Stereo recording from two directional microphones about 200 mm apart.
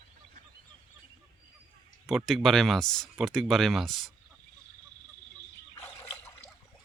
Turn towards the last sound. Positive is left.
turn(degrees=10)  # may be behind; listen again after turning